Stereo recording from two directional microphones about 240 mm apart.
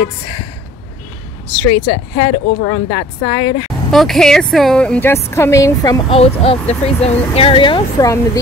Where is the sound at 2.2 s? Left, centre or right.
Left.